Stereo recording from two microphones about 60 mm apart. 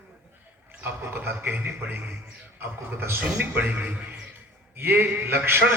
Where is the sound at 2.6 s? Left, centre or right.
Right.